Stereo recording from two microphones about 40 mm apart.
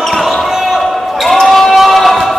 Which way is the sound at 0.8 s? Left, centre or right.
Centre.